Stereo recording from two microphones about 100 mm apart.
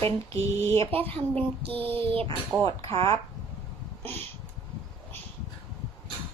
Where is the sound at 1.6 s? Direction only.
65° right (ahead or behind).